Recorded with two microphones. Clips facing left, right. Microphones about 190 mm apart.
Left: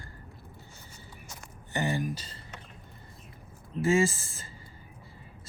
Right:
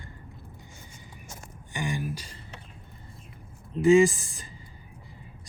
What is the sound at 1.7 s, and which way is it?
Speech, 10° right (ahead or behind).